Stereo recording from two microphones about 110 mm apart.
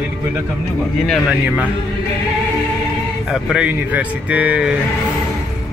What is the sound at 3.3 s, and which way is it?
Speech, centre (ahead or behind).